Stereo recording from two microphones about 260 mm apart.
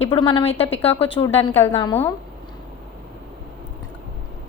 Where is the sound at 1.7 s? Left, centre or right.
Centre.